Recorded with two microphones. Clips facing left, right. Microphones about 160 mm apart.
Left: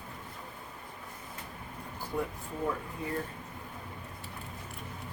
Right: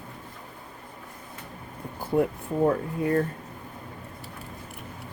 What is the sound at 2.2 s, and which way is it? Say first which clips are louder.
Speech: right 12 dB; 65° right (ahead or behind).